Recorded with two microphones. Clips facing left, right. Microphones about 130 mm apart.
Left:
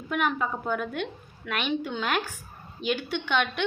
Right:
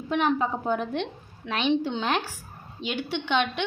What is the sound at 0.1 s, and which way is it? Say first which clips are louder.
A woman's voice: right 3 dB; 25° right (ahead or behind).